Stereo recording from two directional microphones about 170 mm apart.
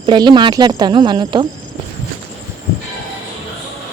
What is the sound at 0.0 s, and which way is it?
Speech, 25° right (ahead or behind).